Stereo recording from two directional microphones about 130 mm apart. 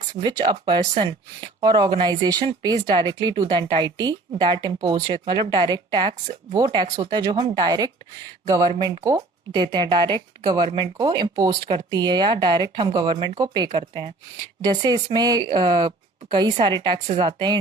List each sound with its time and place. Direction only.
0.2 s speech: 35° right (ahead or behind)